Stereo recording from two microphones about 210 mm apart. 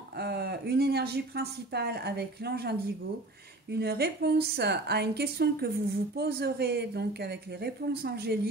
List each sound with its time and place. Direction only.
0.2 s a woman's voice: 50° right (ahead or behind)
3.7 s a woman's voice: 50° right (ahead or behind)